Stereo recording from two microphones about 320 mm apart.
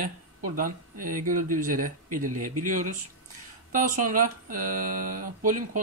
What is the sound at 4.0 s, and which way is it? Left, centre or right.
Speech, right.